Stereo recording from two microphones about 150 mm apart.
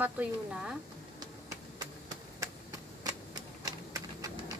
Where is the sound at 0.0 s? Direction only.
10° right (ahead or behind).